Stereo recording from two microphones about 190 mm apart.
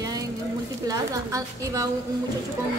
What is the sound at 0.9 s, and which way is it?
A woman's voice, 20° right (ahead or behind).